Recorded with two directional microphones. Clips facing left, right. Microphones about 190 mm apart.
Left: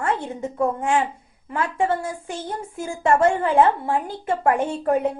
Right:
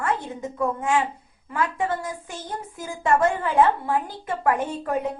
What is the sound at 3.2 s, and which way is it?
A woman's voice, 30° left (ahead or behind).